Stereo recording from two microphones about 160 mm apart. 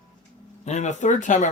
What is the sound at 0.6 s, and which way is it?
Speech, 45° left (ahead or behind).